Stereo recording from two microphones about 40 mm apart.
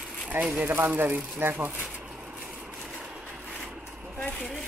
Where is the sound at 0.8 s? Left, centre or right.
Right.